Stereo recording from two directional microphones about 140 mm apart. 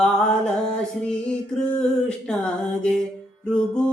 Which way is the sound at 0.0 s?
5° left (ahead or behind).